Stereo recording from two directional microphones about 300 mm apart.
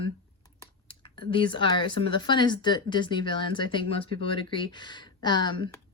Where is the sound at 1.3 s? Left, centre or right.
Centre.